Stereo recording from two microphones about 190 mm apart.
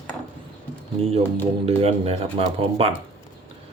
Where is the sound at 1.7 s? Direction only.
30° right (ahead or behind).